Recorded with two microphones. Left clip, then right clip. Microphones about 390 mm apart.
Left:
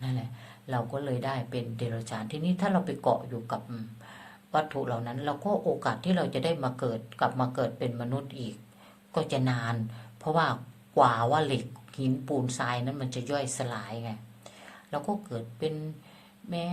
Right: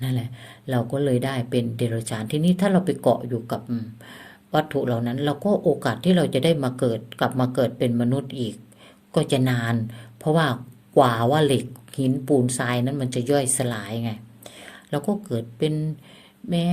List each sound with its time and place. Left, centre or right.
0.0 s speech: right